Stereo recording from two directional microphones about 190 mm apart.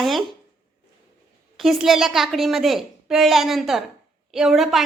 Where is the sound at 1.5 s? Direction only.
Centre (ahead or behind).